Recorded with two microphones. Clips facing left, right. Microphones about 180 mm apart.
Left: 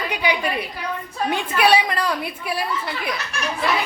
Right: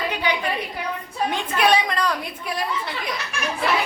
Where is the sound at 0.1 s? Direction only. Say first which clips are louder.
Left 2 dB; 10° left (ahead or behind).